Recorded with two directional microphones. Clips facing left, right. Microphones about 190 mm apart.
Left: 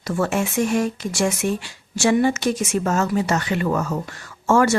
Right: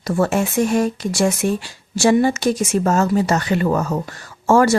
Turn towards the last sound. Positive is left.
turn(degrees=-35)  # may be behind; listen again after turning